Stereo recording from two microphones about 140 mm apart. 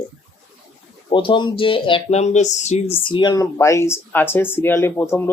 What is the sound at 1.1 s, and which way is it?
Speech, 35° left (ahead or behind).